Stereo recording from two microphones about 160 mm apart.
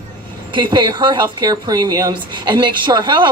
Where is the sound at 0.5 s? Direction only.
30° right (ahead or behind).